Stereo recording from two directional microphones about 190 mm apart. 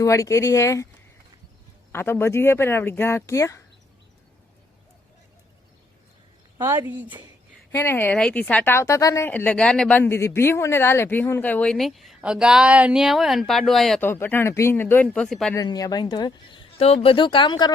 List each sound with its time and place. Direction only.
0.0 s a woman's voice: 15° left (ahead or behind)
1.9 s a woman's voice: 10° left (ahead or behind)
6.6 s speech: 10° right (ahead or behind)
7.7 s a woman's voice: 10° left (ahead or behind)
14.1 s a woman's voice: 10° left (ahead or behind)
15.5 s speech: 20° left (ahead or behind)